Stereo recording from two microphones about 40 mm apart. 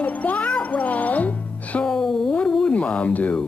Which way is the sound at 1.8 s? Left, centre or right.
Centre.